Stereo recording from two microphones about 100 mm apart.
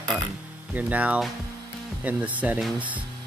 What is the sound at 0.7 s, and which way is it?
Speech, 15° right (ahead or behind).